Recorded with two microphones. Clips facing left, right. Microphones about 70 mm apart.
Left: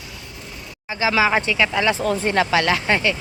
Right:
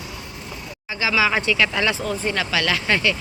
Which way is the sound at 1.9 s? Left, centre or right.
Left.